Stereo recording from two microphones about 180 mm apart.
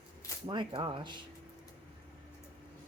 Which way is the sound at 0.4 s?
25° right (ahead or behind).